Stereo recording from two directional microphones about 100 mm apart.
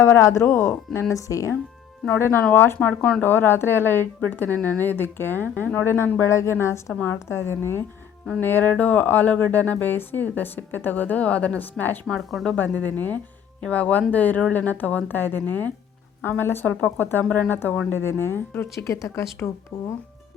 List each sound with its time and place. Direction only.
0.0 s speech: 30° left (ahead or behind)
12.0 s speech: 5° left (ahead or behind)
12.5 s speech: 15° left (ahead or behind)
19.7 s speech: 75° left (ahead or behind)